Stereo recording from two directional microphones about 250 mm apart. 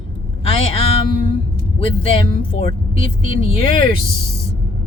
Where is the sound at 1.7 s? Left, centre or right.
Left.